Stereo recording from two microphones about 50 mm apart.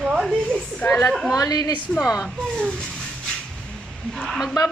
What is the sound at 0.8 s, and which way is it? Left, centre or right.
Speech, left.